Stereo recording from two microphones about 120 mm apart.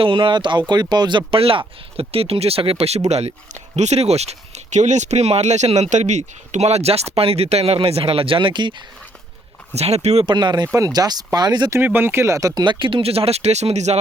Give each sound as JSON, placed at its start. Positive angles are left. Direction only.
{"t": 0.0, "sound": "speech", "side_deg": -45}
{"t": 9.7, "sound": "speech", "side_deg": -65}
{"t": 10.2, "sound": "speech", "side_deg": -40}
{"t": 11.7, "sound": "speech", "side_deg": -15}